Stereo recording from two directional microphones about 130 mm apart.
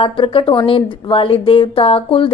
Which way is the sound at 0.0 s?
40° left (ahead or behind).